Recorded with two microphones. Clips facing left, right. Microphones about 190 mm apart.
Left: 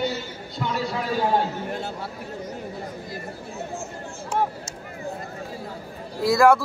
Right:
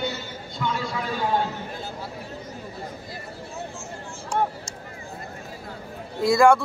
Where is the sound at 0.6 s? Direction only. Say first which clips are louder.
Right 1 dB; 45° left (ahead or behind).